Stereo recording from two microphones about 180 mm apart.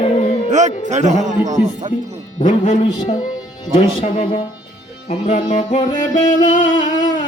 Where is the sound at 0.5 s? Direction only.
40° right (ahead or behind).